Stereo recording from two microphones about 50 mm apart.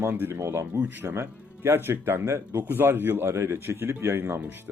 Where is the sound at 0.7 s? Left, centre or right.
Right.